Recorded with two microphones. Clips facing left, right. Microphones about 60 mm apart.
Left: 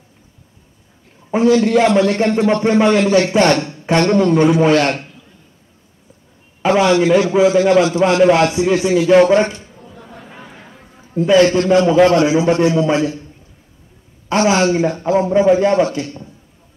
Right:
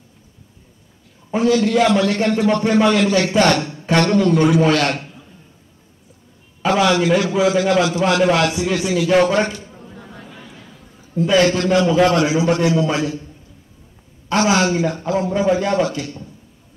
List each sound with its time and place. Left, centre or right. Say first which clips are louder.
1.3 s a man's voice: left 3 dB; left
6.6 s a man's voice: left 3 dB; left
14.3 s a man's voice: left 2 dB; left